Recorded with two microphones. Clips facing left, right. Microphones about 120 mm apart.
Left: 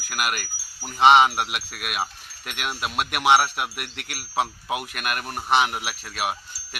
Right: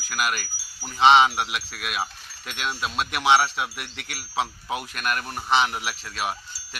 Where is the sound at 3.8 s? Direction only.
55° left (ahead or behind).